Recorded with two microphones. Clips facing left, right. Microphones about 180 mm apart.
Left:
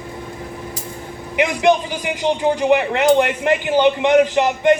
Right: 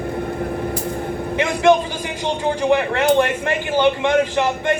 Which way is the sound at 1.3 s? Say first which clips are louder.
Even; 15° left (ahead or behind).